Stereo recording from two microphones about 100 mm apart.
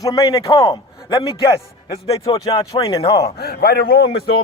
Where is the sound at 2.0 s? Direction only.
70° left (ahead or behind).